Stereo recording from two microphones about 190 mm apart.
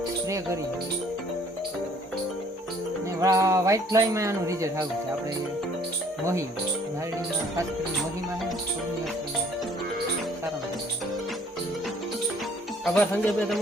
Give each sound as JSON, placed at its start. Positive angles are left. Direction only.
{"t": 0.3, "sound": "speech", "side_deg": -15}
{"t": 3.2, "sound": "speech", "side_deg": -15}
{"t": 12.8, "sound": "speech", "side_deg": 5}